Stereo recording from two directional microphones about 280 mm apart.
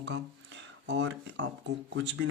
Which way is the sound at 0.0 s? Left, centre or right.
Right.